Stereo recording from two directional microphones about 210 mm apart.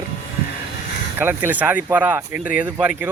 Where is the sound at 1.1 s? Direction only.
10° right (ahead or behind).